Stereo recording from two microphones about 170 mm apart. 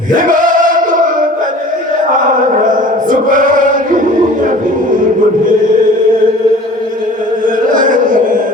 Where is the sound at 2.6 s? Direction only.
50° right (ahead or behind).